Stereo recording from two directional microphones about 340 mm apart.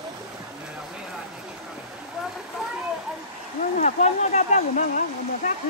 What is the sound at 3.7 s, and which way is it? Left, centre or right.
Speech, centre.